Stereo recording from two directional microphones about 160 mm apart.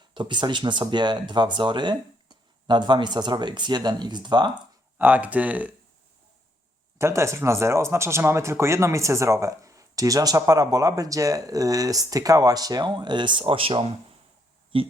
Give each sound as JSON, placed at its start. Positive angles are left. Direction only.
{"t": 0.1, "sound": "speech", "side_deg": -30}
{"t": 4.9, "sound": "speech", "side_deg": -10}
{"t": 7.0, "sound": "speech", "side_deg": -15}